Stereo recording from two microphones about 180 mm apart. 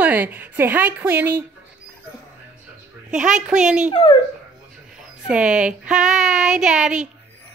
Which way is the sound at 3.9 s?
25° left (ahead or behind).